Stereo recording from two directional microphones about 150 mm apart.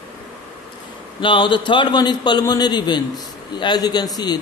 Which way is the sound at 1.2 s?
35° left (ahead or behind).